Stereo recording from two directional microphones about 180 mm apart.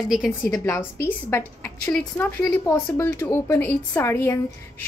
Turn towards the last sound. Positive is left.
turn(degrees=15)  # may be behind; listen again after turning